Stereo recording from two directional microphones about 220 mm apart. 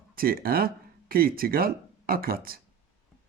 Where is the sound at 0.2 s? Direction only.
40° right (ahead or behind).